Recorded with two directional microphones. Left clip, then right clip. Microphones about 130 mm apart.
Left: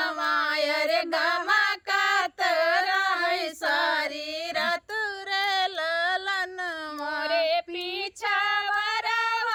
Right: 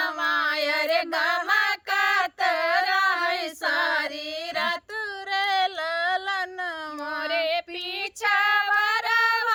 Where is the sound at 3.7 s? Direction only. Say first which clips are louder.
Right 1 dB; 30° left (ahead or behind).